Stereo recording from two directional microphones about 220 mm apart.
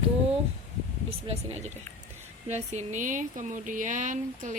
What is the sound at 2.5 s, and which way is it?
Speech, 30° right (ahead or behind).